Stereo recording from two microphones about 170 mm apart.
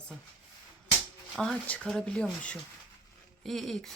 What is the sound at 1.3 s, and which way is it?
Speech, centre (ahead or behind).